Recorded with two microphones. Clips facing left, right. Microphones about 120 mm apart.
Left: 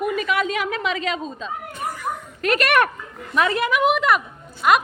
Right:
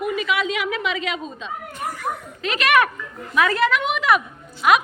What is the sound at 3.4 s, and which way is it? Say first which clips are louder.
Speech: right 1 dB; 20° left (ahead or behind).